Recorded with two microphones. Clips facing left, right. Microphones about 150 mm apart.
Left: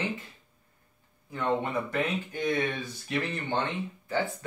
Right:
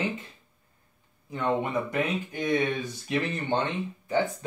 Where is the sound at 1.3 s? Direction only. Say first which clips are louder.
Right 2 dB; 15° right (ahead or behind).